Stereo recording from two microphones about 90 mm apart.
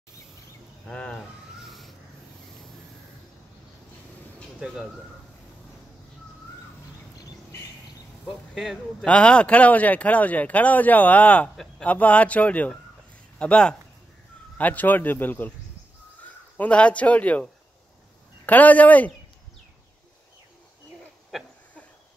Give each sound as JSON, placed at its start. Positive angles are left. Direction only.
{"t": 0.8, "sound": "speech", "side_deg": 10}
{"t": 4.6, "sound": "speech", "side_deg": -10}
{"t": 8.3, "sound": "speech", "side_deg": 0}
{"t": 9.0, "sound": "speech", "side_deg": 10}